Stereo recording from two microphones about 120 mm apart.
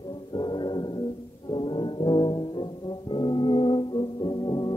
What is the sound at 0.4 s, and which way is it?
Music, 40° left (ahead or behind).